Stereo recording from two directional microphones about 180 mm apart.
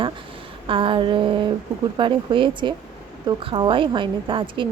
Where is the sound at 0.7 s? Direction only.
30° right (ahead or behind).